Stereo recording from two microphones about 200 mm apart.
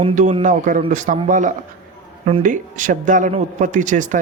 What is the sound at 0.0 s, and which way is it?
Speech, 35° right (ahead or behind).